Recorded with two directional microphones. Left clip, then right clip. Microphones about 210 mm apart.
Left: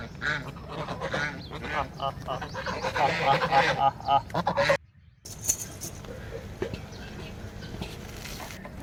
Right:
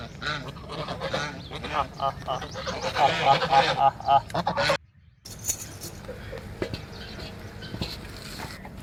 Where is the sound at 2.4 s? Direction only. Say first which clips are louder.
Even; 10° left (ahead or behind).